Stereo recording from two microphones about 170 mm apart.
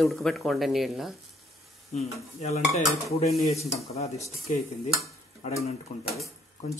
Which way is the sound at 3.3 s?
Centre (ahead or behind).